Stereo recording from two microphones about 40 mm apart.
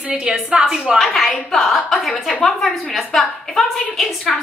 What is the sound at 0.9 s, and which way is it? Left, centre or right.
A woman's voice, centre.